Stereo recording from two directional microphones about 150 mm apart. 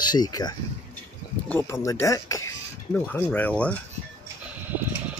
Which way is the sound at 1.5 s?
20° left (ahead or behind).